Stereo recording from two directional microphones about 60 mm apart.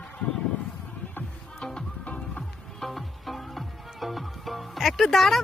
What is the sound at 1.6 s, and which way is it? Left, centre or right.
Music, centre.